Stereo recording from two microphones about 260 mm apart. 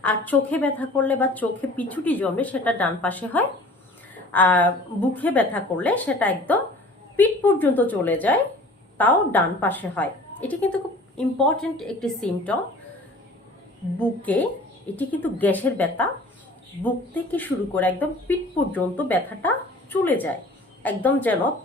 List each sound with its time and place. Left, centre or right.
0.0 s speech: centre
14.0 s speech: centre
17.3 s speech: centre